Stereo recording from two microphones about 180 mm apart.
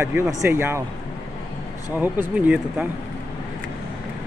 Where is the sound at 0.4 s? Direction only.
10° right (ahead or behind).